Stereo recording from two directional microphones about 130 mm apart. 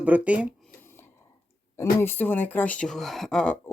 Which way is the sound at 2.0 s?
15° left (ahead or behind).